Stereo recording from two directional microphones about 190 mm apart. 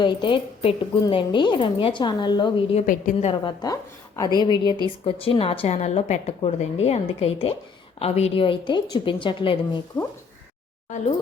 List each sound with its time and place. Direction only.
0.0 s a woman's voice: 25° left (ahead or behind)
2.8 s a woman's voice: 40° left (ahead or behind)
3.6 s a woman's voice: 20° left (ahead or behind)